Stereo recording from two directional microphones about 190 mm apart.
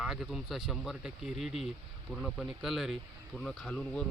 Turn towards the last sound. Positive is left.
turn(degrees=5)  # may be behind; listen again after turning